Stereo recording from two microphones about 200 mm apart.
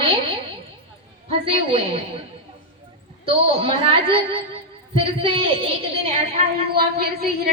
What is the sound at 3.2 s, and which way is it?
A woman's voice, 30° right (ahead or behind).